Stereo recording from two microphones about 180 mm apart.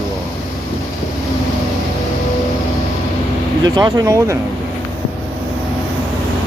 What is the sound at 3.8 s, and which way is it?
Speech, 20° right (ahead or behind).